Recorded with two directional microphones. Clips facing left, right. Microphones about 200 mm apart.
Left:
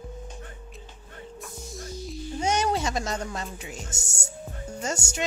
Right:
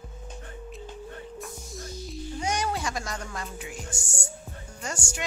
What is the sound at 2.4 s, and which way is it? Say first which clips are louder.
Speech: left 4 dB; 25° left (ahead or behind).